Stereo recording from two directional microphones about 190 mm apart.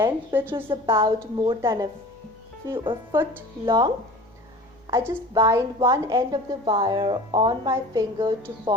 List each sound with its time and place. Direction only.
0.0 s a woman's voice: 15° right (ahead or behind)
0.7 s a woman's voice: 25° right (ahead or behind)